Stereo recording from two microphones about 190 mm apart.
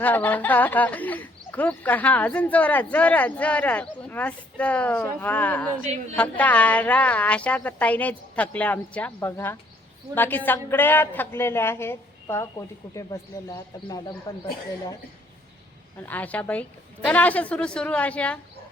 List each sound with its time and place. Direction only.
0.0 s speech: 10° left (ahead or behind)
16.0 s speech: 10° left (ahead or behind)